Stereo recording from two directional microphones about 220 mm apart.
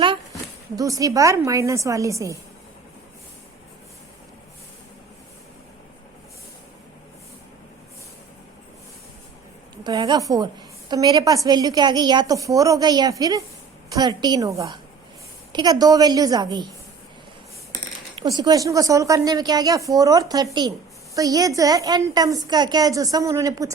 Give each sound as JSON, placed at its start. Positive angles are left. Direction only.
{"t": 0.0, "sound": "speech", "side_deg": -20}
{"t": 9.8, "sound": "a woman's voice", "side_deg": -20}
{"t": 18.2, "sound": "a woman's voice", "side_deg": -20}